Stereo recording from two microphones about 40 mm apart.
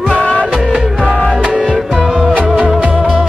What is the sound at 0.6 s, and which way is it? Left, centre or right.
Music, right.